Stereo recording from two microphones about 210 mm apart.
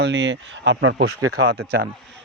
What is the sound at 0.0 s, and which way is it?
Speech, 55° right (ahead or behind).